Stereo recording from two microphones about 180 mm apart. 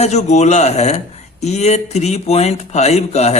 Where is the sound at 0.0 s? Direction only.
40° left (ahead or behind).